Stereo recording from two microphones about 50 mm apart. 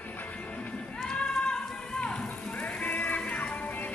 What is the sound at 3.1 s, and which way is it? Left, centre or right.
Music, left.